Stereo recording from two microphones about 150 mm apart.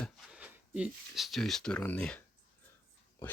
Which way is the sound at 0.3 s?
10° right (ahead or behind).